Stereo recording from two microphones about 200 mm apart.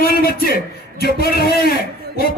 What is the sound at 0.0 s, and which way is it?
A man's voice, 50° left (ahead or behind).